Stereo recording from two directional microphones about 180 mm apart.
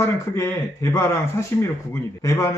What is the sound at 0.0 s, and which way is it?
Speech, 15° left (ahead or behind).